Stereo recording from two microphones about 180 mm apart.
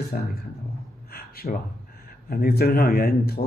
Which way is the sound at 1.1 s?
55° left (ahead or behind).